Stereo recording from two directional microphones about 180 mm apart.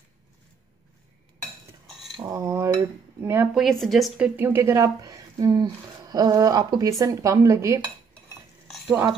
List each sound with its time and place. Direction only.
2.2 s cutlery: 15° right (ahead or behind)
3.5 s speech: centre (ahead or behind)
4.4 s a woman's voice: 10° right (ahead or behind)
8.8 s speech: 15° right (ahead or behind)